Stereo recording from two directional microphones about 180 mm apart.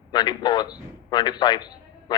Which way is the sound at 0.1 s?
25° left (ahead or behind).